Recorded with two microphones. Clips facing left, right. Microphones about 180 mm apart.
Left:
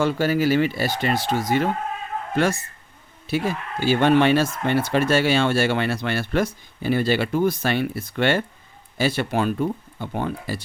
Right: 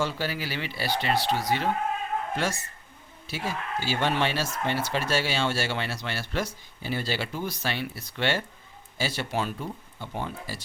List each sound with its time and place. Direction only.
0.0 s speech: 50° left (ahead or behind)